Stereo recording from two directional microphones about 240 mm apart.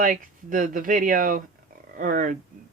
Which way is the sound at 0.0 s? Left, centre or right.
Right.